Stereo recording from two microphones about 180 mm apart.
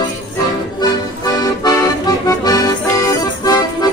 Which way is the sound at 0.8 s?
20° left (ahead or behind).